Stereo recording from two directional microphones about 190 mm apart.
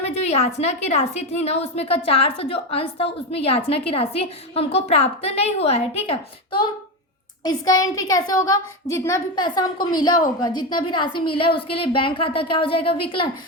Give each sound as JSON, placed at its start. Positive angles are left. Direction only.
{"t": 0.0, "sound": "a woman's voice", "side_deg": 35}
{"t": 7.4, "sound": "a woman's voice", "side_deg": 20}